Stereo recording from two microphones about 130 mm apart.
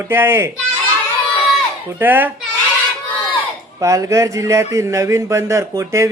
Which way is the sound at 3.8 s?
25° right (ahead or behind).